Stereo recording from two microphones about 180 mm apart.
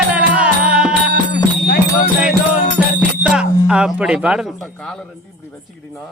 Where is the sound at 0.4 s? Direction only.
5° right (ahead or behind).